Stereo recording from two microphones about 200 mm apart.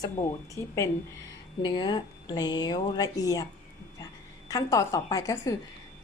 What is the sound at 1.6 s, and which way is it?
A woman's voice, 20° left (ahead or behind).